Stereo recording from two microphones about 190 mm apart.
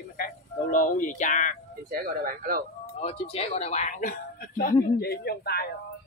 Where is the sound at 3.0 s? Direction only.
30° left (ahead or behind); by 5.7 s 55° left (ahead or behind).